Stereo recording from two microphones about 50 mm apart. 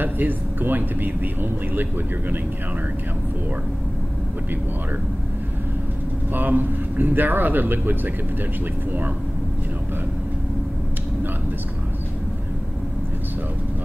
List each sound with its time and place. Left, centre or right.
0.0 s speech: right
6.3 s speech: right